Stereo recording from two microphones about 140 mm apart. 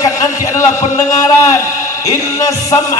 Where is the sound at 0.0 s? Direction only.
25° left (ahead or behind).